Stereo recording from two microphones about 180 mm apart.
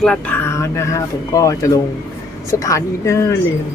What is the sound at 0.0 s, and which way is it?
Speech, 5° left (ahead or behind).